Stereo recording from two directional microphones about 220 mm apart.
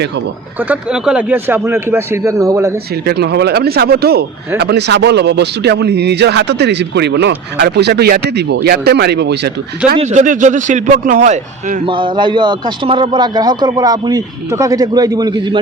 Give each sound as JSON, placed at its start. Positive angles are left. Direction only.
{"t": 0.7, "sound": "a man's voice", "side_deg": -5}
{"t": 3.1, "sound": "speech", "side_deg": -50}
{"t": 10.0, "sound": "a man's voice", "side_deg": -30}
{"t": 11.9, "sound": "a man's voice", "side_deg": -20}